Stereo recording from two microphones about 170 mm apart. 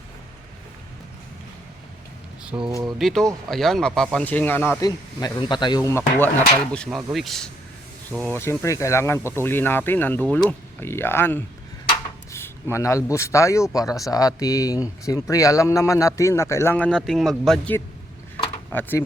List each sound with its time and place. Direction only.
2.6 s speech: 25° right (ahead or behind)
3.0 s speech: centre (ahead or behind)
4.9 s speech: 25° left (ahead or behind)
6.7 s speech: centre (ahead or behind)
8.2 s a man's voice: 15° left (ahead or behind)